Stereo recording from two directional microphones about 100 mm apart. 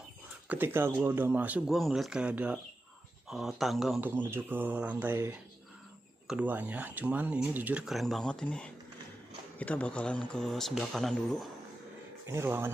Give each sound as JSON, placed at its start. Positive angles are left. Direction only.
{"t": 0.5, "sound": "speech", "side_deg": -20}
{"t": 1.7, "sound": "speech", "side_deg": 0}
{"t": 3.3, "sound": "speech", "side_deg": 0}
{"t": 4.0, "sound": "speech", "side_deg": -20}
{"t": 7.8, "sound": "speech", "side_deg": 0}
{"t": 12.3, "sound": "speech", "side_deg": -20}